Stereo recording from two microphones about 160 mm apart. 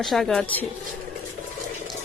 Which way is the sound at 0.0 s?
Centre (ahead or behind).